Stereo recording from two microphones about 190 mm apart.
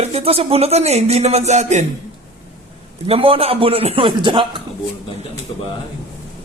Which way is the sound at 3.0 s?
30° right (ahead or behind).